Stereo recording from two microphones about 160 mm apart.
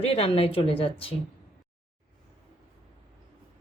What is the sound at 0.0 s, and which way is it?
Speech, 35° left (ahead or behind).